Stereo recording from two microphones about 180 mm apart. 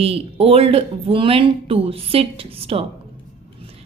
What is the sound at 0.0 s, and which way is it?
A woman's voice, 30° right (ahead or behind).